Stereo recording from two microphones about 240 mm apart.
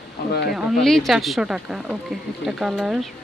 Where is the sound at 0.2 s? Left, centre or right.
Left.